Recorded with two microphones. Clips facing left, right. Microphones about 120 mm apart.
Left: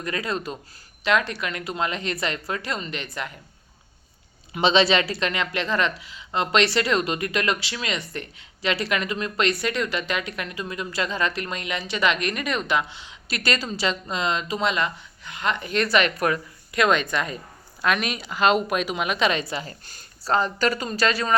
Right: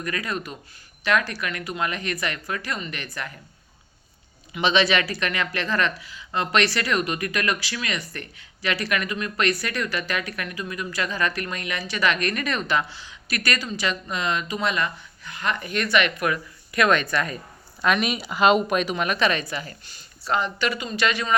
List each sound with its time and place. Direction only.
0.0 s speech: 25° left (ahead or behind)
4.6 s speech: 30° left (ahead or behind)
16.7 s speech: 20° left (ahead or behind)
17.8 s speech: centre (ahead or behind); by 19.7 s 25° left (ahead or behind)
19.8 s speech: 45° left (ahead or behind)